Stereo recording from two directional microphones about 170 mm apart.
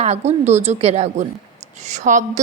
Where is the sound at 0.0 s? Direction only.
40° right (ahead or behind).